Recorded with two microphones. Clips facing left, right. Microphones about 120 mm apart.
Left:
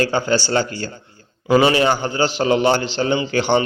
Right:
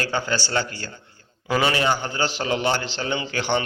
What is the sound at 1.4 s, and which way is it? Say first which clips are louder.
A man's voice: left 7 dB; 20° left (ahead or behind).